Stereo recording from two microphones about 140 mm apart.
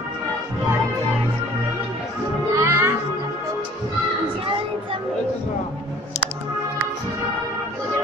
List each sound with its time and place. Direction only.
2.5 s music: 20° right (ahead or behind)